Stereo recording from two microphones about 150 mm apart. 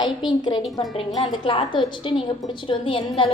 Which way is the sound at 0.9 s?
30° left (ahead or behind).